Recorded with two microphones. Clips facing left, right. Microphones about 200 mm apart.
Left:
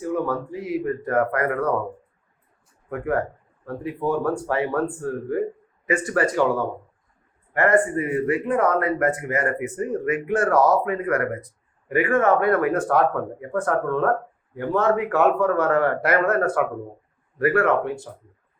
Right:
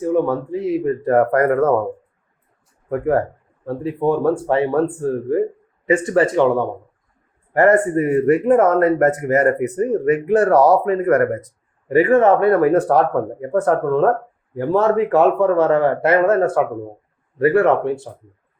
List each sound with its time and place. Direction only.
0.0 s a man's voice: 25° right (ahead or behind)
1.1 s speech: 40° right (ahead or behind)
3.7 s a man's voice: 30° right (ahead or behind)
7.5 s a man's voice: 40° right (ahead or behind)